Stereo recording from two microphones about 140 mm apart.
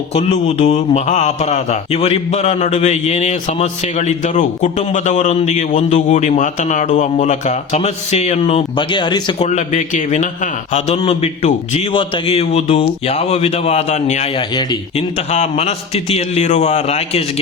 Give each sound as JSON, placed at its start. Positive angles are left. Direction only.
{"t": 0.1, "sound": "a man's voice", "side_deg": 50}
{"t": 9.4, "sound": "a man's voice", "side_deg": 55}
{"t": 11.9, "sound": "a man's voice", "side_deg": 40}
{"t": 14.3, "sound": "speech", "side_deg": 30}
{"t": 14.9, "sound": "a man's voice", "side_deg": 50}